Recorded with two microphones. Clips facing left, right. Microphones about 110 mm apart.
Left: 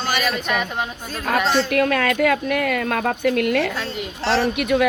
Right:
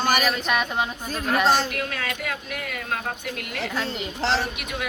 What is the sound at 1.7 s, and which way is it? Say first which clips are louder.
Speech: left 11 dB; 65° left (ahead or behind).